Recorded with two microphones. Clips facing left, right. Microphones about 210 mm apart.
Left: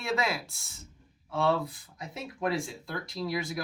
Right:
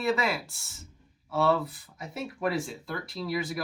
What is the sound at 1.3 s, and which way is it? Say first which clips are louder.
Speech: right 2 dB; 5° right (ahead or behind).